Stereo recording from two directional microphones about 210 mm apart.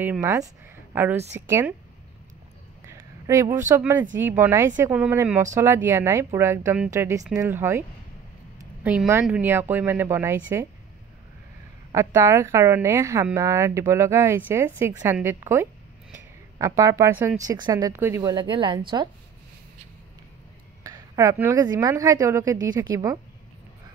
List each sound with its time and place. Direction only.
0.0 s a woman's voice: 10° right (ahead or behind)
2.9 s a sound: 15° right (ahead or behind)
3.6 s a woman's voice: 10° right (ahead or behind)
8.8 s a woman's voice: 5° right (ahead or behind)
11.9 s a woman's voice: 15° right (ahead or behind)
20.8 s a woman's voice: 15° right (ahead or behind)